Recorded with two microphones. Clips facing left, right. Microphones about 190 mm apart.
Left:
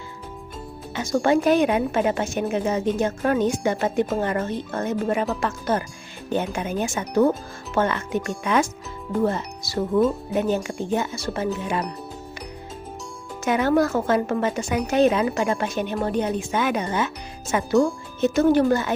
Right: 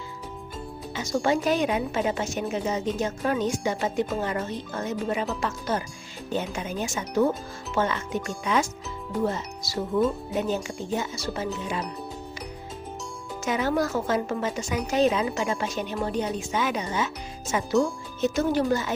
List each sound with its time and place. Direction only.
0.9 s a woman's voice: 55° left (ahead or behind)
7.8 s a woman's voice: 55° left (ahead or behind)
13.4 s a woman's voice: 60° left (ahead or behind)